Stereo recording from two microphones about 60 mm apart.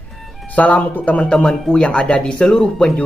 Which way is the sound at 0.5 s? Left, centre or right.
Left.